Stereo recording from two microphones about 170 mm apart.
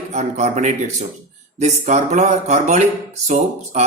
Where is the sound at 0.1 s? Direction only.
40° right (ahead or behind).